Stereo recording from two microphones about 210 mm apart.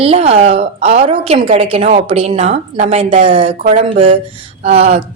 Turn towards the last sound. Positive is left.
turn(degrees=-30)  # may be behind; listen again after turning